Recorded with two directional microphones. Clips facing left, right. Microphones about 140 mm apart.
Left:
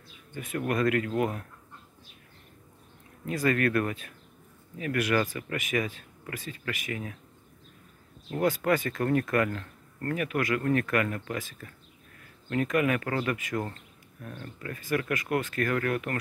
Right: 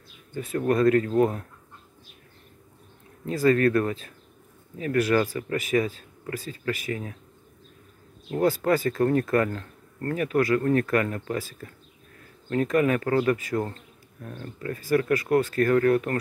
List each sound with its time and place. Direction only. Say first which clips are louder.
0.3 s speech: right 6 dB; 30° right (ahead or behind)
3.3 s speech: right 6 dB; 30° right (ahead or behind)
8.4 s speech: right 3 dB; 35° right (ahead or behind)